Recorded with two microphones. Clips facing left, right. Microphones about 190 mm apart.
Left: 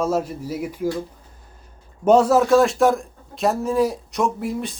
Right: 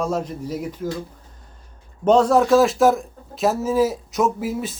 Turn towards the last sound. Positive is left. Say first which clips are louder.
# right 1 dB
turn(degrees=-5)  # may be behind; listen again after turning